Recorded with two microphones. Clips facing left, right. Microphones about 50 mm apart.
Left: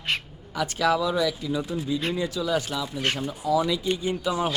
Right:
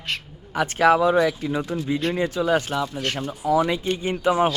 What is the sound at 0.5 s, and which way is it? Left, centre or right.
Speech, right.